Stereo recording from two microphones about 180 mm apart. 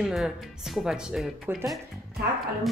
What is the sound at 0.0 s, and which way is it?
Speech, centre (ahead or behind).